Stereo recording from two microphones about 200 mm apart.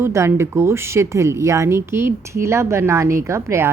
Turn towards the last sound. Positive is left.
turn(degrees=-15)  # may be behind; listen again after turning